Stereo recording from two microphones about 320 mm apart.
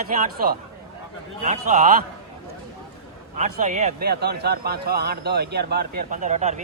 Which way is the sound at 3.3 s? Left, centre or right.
Right.